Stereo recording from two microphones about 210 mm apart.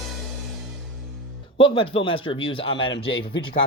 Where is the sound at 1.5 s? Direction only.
25° left (ahead or behind).